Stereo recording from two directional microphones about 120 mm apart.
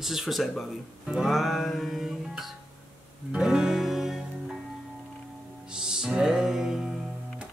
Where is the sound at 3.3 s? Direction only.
5° right (ahead or behind).